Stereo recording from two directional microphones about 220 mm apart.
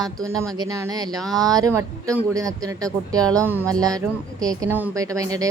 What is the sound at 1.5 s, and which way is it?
Speech, 15° right (ahead or behind).